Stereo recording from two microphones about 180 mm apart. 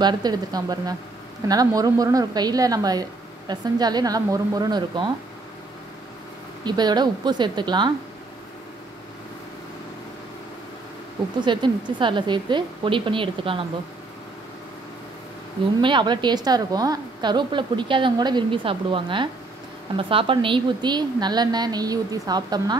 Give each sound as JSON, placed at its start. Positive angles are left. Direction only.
{"t": 0.0, "sound": "a woman's voice", "side_deg": -20}
{"t": 6.6, "sound": "a woman's voice", "side_deg": -25}
{"t": 11.4, "sound": "a woman's voice", "side_deg": -25}
{"t": 15.8, "sound": "a woman's voice", "side_deg": -25}